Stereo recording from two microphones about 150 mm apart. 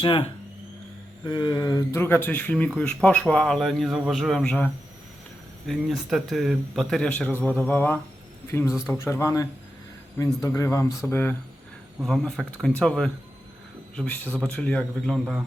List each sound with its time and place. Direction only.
0.0 s speech: 35° left (ahead or behind)
1.9 s a man's voice: 15° left (ahead or behind)
8.6 s a man's voice: 5° right (ahead or behind)
8.9 s speech: 15° left (ahead or behind)
11.9 s a man's voice: centre (ahead or behind)